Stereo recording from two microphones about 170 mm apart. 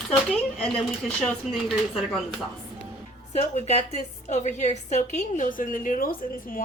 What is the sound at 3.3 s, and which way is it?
A woman's voice, 40° left (ahead or behind).